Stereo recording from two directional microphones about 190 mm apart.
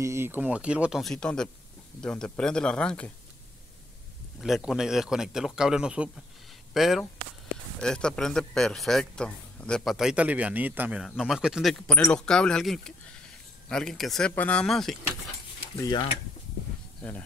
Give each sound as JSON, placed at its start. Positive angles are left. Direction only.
{"t": 0.0, "sound": "a man's voice", "side_deg": -15}
{"t": 4.4, "sound": "a man's voice", "side_deg": 0}
{"t": 15.8, "sound": "speech", "side_deg": 25}